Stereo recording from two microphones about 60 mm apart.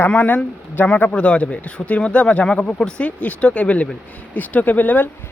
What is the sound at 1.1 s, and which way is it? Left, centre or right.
Speech, centre.